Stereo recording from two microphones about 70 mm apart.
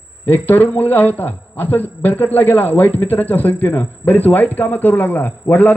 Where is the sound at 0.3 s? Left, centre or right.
Left.